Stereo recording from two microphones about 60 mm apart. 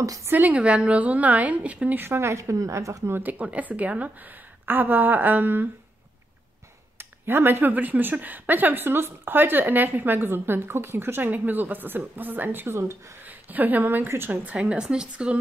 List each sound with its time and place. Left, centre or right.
0.3 s a woman's voice: right
2.0 s speech: right
2.3 s a woman's voice: right
3.2 s a woman's voice: right
7.0 s speech: right
12.7 s speech: right
13.2 s a woman's voice: right